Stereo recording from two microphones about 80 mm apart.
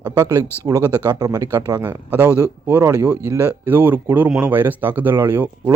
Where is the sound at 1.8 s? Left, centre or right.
Right.